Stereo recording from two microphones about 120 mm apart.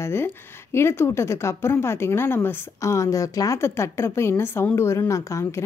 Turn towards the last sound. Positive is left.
turn(degrees=25)  # may be behind; listen again after turning